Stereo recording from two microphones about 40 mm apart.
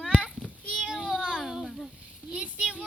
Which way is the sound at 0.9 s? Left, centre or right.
Centre.